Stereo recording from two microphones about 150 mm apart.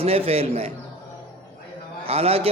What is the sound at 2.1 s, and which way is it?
Speech, 40° right (ahead or behind).